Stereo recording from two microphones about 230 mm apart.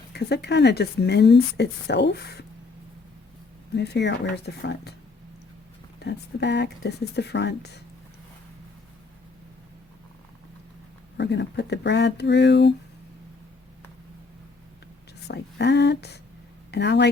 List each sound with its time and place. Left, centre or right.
0.1 s a woman's voice: left
3.8 s a woman's voice: left
6.0 s a woman's voice: left
11.2 s a woman's voice: left
15.3 s a woman's voice: left